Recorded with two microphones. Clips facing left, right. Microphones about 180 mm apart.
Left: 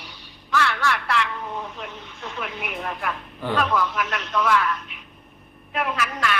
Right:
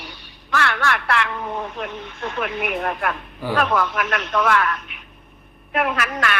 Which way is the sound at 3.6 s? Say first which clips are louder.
Right 3 dB; 55° right (ahead or behind).